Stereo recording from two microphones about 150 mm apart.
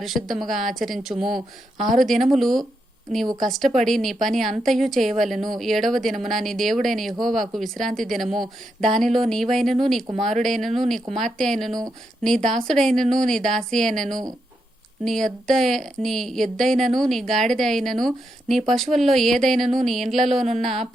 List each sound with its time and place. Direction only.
0.0 s a woman's voice: centre (ahead or behind)